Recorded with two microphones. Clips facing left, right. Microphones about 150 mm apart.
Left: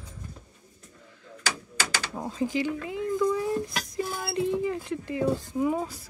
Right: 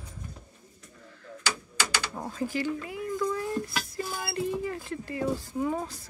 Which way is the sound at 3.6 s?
20° left (ahead or behind).